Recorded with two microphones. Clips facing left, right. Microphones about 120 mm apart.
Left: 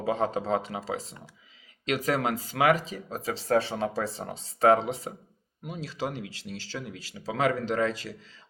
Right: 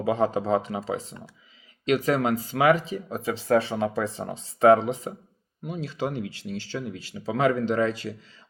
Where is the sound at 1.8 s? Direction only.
40° left (ahead or behind).